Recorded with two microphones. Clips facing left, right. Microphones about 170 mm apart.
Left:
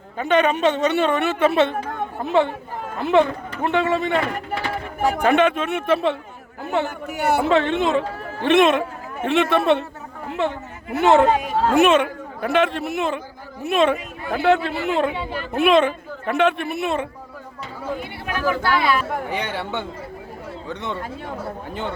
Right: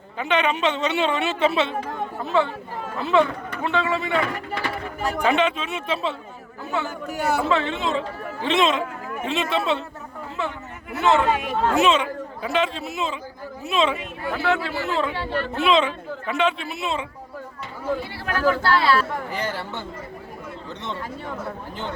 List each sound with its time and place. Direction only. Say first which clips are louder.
0.2 s a woman's voice: left 4 dB; 45° left (ahead or behind)
10.9 s a woman's voice: left 5 dB; 55° left (ahead or behind)
11.3 s speech: left 3 dB; 35° left (ahead or behind)
11.7 s speech: left 5 dB; 55° left (ahead or behind)
15.1 s a woman's voice: right 2 dB; 5° left (ahead or behind)
15.5 s a woman's voice: left 5 dB; 50° left (ahead or behind)
17.9 s speech: right 1 dB; 15° left (ahead or behind)
19.3 s speech: left 3 dB; 70° left (ahead or behind)